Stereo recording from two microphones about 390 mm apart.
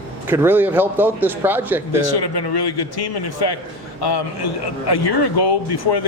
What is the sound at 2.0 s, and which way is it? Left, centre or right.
A man's voice, left.